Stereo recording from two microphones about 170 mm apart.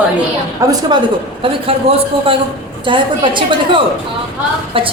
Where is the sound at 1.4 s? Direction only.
35° right (ahead or behind).